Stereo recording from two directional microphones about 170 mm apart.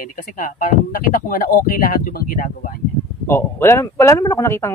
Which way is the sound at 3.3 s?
15° left (ahead or behind).